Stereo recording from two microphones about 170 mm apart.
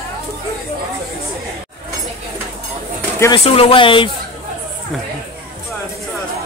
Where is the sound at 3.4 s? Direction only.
35° left (ahead or behind).